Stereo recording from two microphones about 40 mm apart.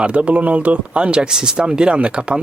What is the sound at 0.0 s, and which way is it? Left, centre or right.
Speech, right.